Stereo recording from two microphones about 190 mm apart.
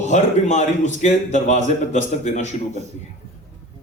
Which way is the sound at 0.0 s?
40° left (ahead or behind).